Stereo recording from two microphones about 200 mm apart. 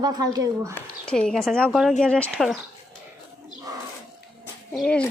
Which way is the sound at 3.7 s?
20° right (ahead or behind).